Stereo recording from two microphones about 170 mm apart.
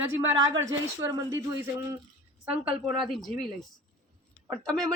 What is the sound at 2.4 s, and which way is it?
A woman's voice, 5° right (ahead or behind).